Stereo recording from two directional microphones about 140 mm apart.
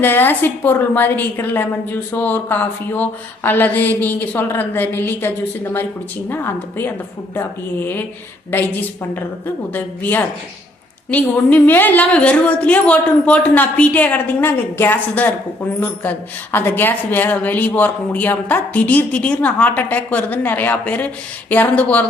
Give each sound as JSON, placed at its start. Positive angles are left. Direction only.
{"t": 0.0, "sound": "a woman's voice", "side_deg": 15}